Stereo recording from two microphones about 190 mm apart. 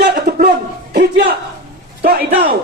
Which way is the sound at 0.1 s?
55° right (ahead or behind).